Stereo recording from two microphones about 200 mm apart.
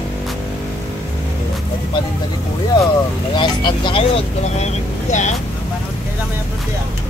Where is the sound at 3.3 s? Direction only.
25° left (ahead or behind).